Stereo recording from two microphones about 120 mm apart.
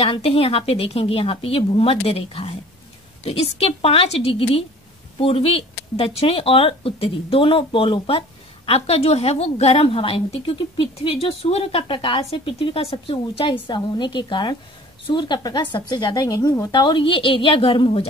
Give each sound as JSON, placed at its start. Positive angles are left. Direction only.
{"t": 0.0, "sound": "speech", "side_deg": 55}
{"t": 16.7, "sound": "speech", "side_deg": 40}